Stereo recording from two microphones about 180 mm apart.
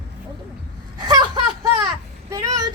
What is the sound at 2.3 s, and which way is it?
Vehicle, 20° right (ahead or behind).